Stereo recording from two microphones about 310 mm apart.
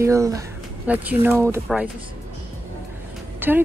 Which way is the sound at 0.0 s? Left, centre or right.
Centre.